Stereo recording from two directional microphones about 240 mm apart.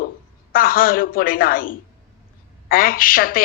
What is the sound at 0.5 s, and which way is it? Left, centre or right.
A woman's voice, left.